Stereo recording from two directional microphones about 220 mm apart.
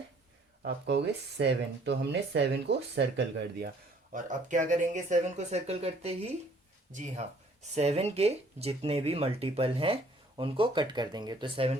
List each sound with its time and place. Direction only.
0.6 s speech: 50° right (ahead or behind)
4.1 s speech: 35° right (ahead or behind)